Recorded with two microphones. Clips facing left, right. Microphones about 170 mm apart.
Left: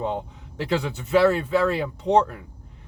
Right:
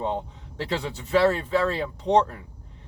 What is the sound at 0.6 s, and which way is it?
Speech, 30° right (ahead or behind).